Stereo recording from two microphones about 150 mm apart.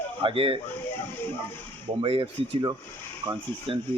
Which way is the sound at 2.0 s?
40° right (ahead or behind).